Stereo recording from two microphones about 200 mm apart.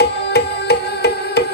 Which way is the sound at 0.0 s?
55° left (ahead or behind).